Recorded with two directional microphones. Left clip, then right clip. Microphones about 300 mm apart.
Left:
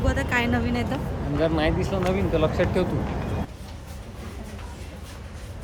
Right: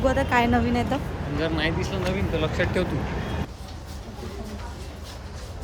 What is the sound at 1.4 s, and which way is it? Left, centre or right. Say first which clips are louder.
Speech: left 3 dB; left.